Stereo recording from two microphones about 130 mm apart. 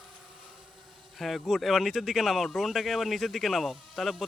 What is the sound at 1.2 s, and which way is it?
Speech, centre (ahead or behind).